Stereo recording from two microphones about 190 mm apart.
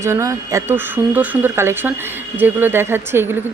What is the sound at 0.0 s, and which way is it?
Speech, 15° right (ahead or behind).